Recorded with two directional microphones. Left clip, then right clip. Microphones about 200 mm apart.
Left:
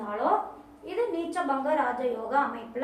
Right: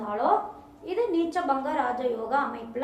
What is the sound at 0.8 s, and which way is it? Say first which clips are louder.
A woman's voice: right 3 dB; 20° right (ahead or behind).